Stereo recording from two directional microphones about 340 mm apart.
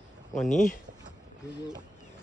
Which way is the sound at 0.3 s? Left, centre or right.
Left.